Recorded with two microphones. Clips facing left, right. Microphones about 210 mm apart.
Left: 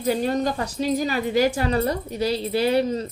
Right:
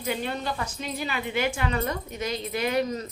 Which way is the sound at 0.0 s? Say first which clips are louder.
Left 8 dB; 40° left (ahead or behind).